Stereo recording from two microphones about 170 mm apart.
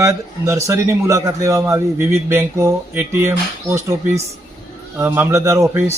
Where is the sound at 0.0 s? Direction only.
15° right (ahead or behind).